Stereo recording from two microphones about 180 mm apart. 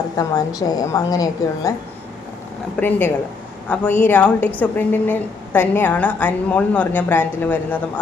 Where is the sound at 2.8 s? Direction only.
10° left (ahead or behind).